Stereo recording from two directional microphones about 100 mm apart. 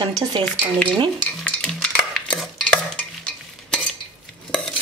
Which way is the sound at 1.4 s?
5° left (ahead or behind).